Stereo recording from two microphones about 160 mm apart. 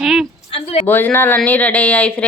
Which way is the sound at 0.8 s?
10° left (ahead or behind).